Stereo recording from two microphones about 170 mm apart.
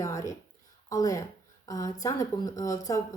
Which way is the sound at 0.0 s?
20° left (ahead or behind).